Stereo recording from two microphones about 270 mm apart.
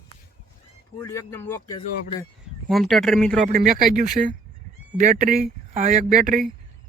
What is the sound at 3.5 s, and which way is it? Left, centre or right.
Speech, right.